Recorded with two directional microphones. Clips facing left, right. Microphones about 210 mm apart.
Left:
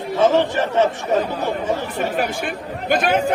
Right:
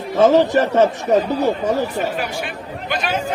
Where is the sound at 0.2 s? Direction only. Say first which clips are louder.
Right 4 dB; 40° right (ahead or behind).